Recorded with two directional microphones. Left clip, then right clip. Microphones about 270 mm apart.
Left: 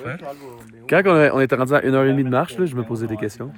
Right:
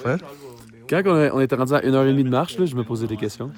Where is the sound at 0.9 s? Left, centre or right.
Centre.